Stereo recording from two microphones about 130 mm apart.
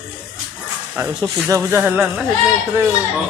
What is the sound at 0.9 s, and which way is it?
Speech, 10° right (ahead or behind).